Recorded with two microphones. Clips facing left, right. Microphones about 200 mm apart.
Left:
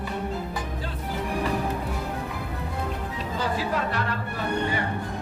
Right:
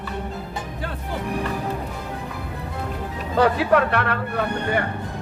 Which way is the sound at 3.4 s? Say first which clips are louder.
Right 10 dB; 65° right (ahead or behind).